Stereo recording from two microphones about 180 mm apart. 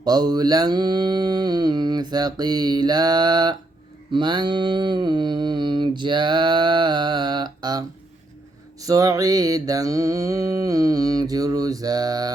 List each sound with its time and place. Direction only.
0.0 s mantra: 20° right (ahead or behind)